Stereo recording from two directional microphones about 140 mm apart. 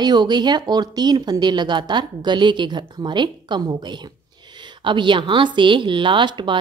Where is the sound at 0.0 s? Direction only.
30° right (ahead or behind).